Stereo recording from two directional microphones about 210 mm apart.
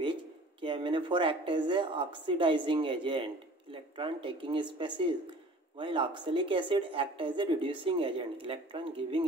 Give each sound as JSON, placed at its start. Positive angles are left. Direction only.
{"t": 0.0, "sound": "a woman's voice", "side_deg": -25}